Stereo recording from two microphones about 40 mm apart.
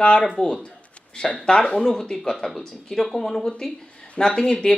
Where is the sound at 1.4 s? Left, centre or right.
Left.